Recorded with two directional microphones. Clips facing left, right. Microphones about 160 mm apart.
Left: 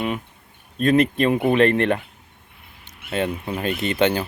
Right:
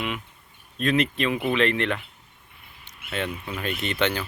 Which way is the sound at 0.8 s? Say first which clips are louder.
Left 6 dB; 40° left (ahead or behind).